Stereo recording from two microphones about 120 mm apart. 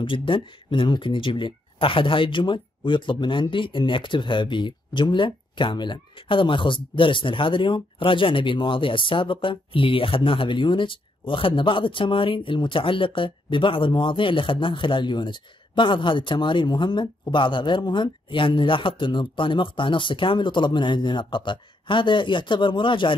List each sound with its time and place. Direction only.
0.0 s speech: 45° left (ahead or behind)